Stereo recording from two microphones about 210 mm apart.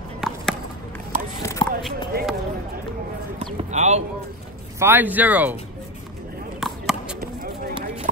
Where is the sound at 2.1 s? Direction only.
45° right (ahead or behind).